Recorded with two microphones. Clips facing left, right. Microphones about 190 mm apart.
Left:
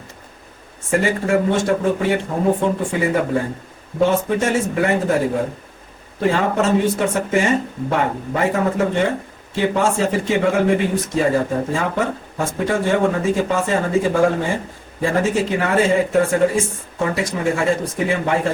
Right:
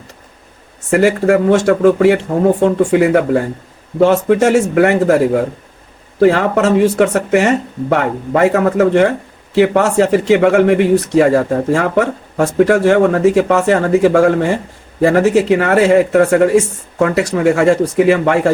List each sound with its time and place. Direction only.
0.9 s speech: 75° right (ahead or behind)